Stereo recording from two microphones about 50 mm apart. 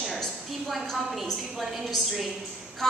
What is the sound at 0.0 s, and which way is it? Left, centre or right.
A woman's voice, centre.